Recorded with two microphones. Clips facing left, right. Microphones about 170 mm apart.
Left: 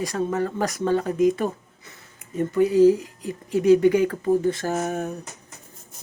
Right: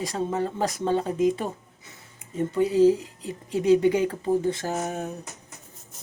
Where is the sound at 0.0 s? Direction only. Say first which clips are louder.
Left 2 dB; 25° right (ahead or behind).